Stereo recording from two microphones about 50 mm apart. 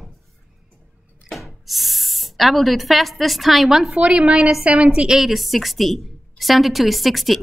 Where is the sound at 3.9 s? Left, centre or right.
Right.